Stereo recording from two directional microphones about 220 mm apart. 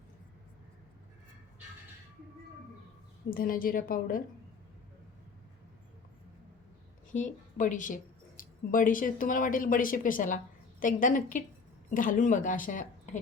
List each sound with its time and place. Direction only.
3.2 s speech: 40° left (ahead or behind)
7.1 s speech: 35° left (ahead or behind)